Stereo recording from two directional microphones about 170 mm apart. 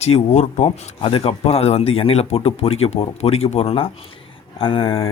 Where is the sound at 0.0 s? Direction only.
40° left (ahead or behind).